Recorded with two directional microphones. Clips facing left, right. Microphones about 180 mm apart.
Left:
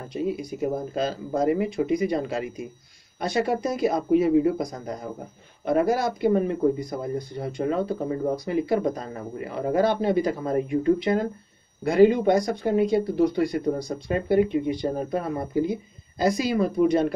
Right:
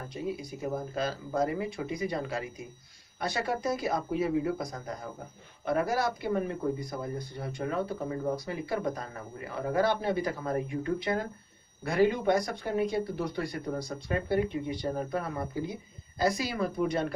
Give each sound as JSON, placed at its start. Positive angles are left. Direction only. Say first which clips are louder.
{"t": 0.4, "sound": "speech", "louder": "left 7 dB", "side_deg": 20}